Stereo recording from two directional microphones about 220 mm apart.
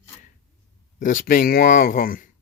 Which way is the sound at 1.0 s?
35° left (ahead or behind).